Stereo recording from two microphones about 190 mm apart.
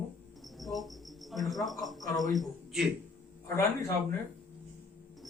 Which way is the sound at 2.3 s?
Centre (ahead or behind).